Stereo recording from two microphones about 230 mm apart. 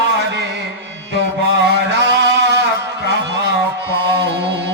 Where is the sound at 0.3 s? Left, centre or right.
Right.